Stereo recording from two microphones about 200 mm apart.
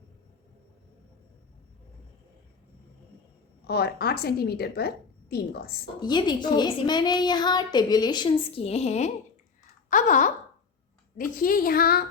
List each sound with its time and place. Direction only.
3.7 s a woman's voice: 50° left (ahead or behind)
6.0 s a child's voice: 20° left (ahead or behind)
9.9 s a sound: 40° left (ahead or behind)
11.2 s a woman's voice: 45° left (ahead or behind)